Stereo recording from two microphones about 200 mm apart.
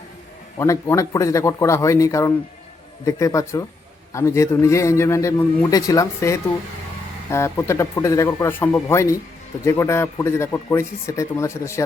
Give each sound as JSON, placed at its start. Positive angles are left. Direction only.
{"t": 0.6, "sound": "a man's voice", "side_deg": 15}